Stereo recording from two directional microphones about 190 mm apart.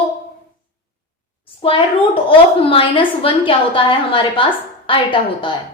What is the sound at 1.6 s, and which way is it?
A woman's voice, 30° left (ahead or behind).